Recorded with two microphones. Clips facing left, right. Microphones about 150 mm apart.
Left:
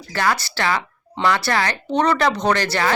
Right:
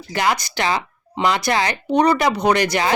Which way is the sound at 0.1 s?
15° right (ahead or behind).